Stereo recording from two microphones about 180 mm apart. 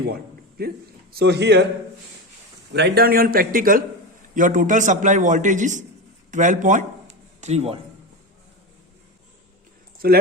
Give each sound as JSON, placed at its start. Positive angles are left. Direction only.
{"t": 0.6, "sound": "a man's voice", "side_deg": -60}
{"t": 2.7, "sound": "a man's voice", "side_deg": -65}
{"t": 10.0, "sound": "a man's voice", "side_deg": -55}